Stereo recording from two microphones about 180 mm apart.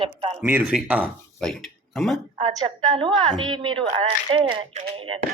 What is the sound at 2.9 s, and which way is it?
A woman's voice, 30° right (ahead or behind).